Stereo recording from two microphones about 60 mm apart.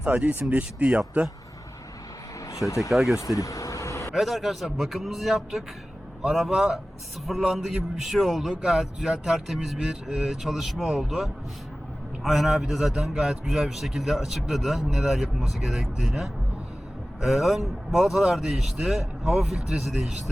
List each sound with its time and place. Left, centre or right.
0.0 s speech: right
2.6 s speech: left
2.9 s speech: centre
3.3 s vehicle: left
4.1 s a man's voice: centre